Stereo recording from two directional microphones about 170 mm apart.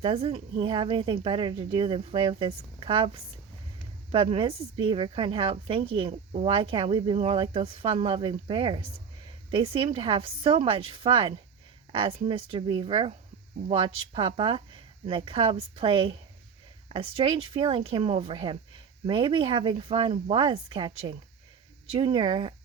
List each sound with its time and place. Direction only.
0.0 s speech: 35° right (ahead or behind)
4.1 s speech: 30° right (ahead or behind)